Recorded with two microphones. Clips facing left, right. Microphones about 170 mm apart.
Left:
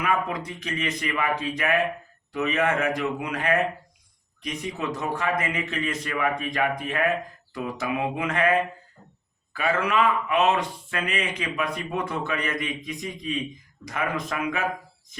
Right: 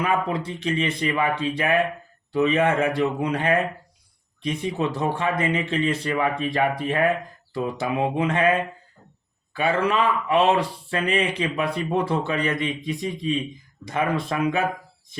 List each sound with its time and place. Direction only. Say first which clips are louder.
0.0 s speech: right 3 dB; 30° right (ahead or behind)